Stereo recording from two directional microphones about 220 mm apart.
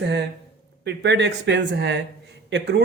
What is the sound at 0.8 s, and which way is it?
Speech, 50° right (ahead or behind).